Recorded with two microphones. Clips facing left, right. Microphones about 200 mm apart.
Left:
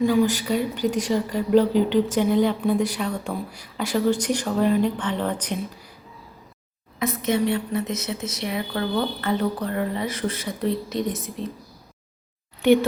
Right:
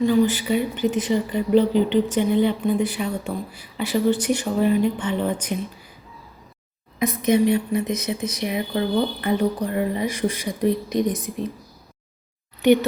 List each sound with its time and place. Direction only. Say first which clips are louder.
0.0 s speech: right 1 dB; 10° left (ahead or behind)
0.3 s speech: right 1 dB; 5° right (ahead or behind)
7.0 s speech: right 4 dB; 15° right (ahead or behind)